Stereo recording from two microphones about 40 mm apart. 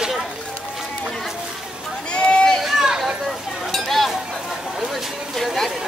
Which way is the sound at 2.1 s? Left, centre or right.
Left.